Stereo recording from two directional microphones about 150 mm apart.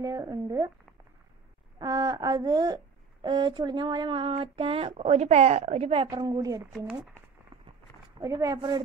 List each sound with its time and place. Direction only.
0.0 s speech: 25° right (ahead or behind)
1.8 s speech: 25° right (ahead or behind)
6.2 s speech: 25° right (ahead or behind)
8.2 s speech: 20° right (ahead or behind)